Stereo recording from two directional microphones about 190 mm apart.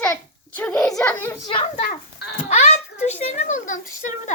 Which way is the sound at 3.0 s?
35° left (ahead or behind).